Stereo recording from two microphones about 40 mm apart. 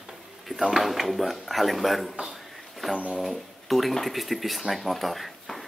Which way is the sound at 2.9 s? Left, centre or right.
Right.